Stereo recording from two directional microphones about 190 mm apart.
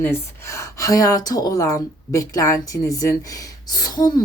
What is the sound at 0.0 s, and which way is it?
Speech, 15° left (ahead or behind).